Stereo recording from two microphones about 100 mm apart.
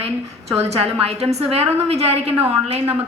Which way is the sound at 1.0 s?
90° right.